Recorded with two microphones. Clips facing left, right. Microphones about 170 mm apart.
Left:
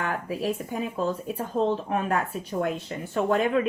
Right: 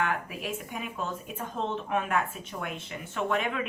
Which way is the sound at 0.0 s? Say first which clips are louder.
Left 3 dB; 35° left (ahead or behind).